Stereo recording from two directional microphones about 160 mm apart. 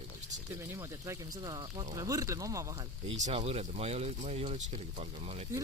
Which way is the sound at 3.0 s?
40° right (ahead or behind).